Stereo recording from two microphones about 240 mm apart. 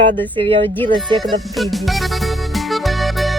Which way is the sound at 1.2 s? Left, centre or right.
Centre.